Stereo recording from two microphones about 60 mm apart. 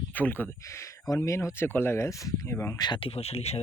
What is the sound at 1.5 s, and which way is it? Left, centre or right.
Speech, left.